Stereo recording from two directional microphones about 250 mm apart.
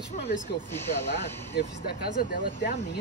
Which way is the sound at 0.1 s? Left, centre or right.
Left.